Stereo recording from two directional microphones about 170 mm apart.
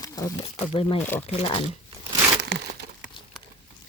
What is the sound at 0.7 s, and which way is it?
Speech, 35° left (ahead or behind).